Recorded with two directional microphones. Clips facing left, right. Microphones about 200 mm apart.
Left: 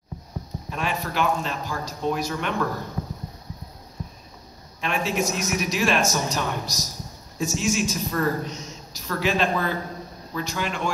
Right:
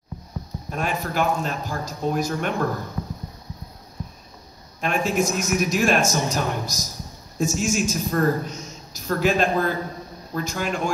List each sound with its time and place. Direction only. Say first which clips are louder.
0.7 s a man's voice: right 2 dB; 45° right (ahead or behind)
4.7 s a man's voice: right 3 dB; 45° right (ahead or behind)